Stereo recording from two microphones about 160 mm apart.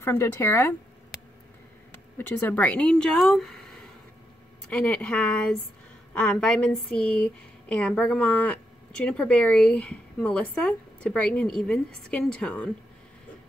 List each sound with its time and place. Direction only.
0.0 s speech: 15° left (ahead or behind)
2.1 s speech: 10° left (ahead or behind)